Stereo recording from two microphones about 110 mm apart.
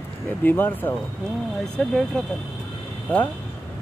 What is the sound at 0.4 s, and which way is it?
Speech, 15° left (ahead or behind).